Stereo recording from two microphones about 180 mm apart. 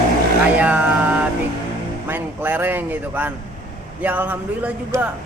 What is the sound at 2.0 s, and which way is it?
Speech, 10° right (ahead or behind).